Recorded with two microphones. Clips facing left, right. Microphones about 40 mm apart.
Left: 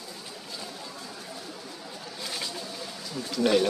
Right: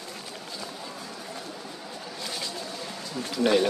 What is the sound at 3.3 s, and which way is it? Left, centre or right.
Speech, centre.